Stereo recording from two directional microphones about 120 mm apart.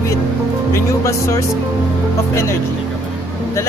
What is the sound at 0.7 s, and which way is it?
Music, 25° left (ahead or behind).